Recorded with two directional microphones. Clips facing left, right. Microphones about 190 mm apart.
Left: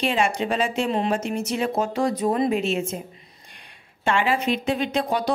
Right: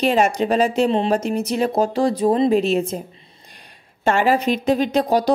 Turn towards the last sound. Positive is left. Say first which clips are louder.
# right 6 dB
turn(degrees=-40)  # may be behind; listen again after turning